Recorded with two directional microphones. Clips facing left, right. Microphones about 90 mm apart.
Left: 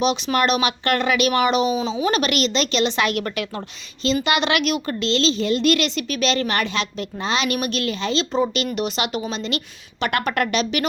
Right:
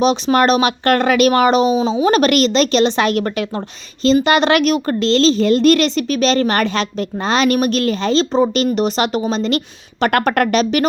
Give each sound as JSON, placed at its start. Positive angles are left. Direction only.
{"t": 0.0, "sound": "a woman's voice", "side_deg": -35}